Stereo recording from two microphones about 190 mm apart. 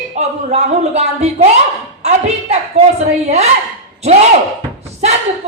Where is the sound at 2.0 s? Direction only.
35° right (ahead or behind).